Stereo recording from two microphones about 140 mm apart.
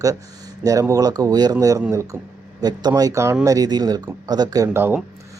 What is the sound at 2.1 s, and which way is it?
Speech, 10° right (ahead or behind).